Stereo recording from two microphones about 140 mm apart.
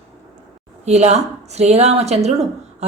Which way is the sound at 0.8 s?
50° right (ahead or behind).